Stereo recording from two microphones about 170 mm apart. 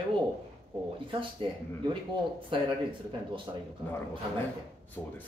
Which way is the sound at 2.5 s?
30° right (ahead or behind).